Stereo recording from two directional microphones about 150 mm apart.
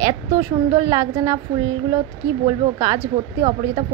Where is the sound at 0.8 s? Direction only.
20° right (ahead or behind).